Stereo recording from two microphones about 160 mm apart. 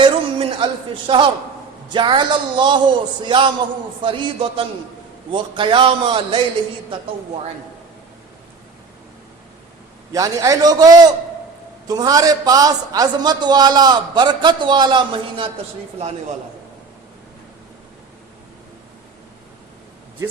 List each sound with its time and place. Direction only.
0.0 s a sound: 35° right (ahead or behind)
1.9 s a man's voice: 30° right (ahead or behind)
10.1 s a man's voice: 20° right (ahead or behind)